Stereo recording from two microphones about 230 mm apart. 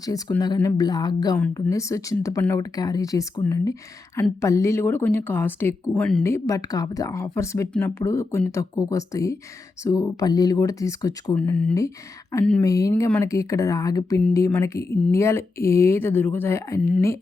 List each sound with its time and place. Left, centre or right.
0.0 s speech: centre